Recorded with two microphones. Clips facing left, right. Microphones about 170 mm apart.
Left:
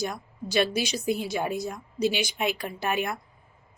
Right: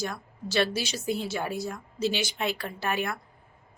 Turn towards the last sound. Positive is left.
turn(degrees=20)  # may be behind; listen again after turning